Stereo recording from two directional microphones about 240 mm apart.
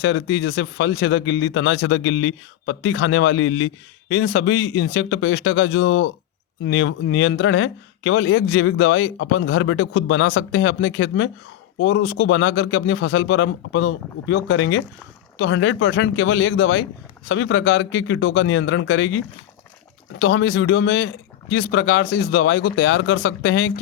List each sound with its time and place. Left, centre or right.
0.0 s speech: left
20.1 s speech: left